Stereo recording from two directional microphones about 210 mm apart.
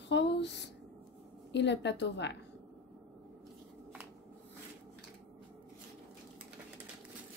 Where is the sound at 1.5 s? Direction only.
55° left (ahead or behind).